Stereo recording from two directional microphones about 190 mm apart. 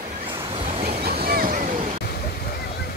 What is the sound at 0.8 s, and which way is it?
Boat, 55° right (ahead or behind).